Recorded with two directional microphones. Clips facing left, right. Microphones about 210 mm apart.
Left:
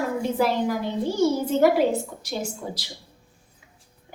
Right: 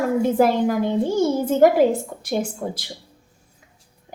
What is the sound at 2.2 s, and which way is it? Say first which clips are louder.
Speech: right 6 dB; 55° right (ahead or behind).